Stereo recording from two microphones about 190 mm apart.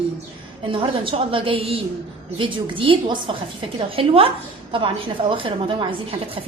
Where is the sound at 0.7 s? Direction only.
25° right (ahead or behind).